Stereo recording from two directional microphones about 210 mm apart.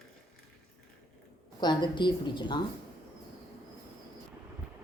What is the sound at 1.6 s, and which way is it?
A woman's voice, 20° left (ahead or behind).